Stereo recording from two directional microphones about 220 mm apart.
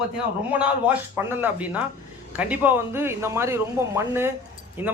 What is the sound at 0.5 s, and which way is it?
Speech, 5° right (ahead or behind).